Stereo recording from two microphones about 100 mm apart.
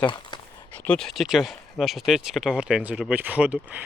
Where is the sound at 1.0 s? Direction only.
Centre (ahead or behind).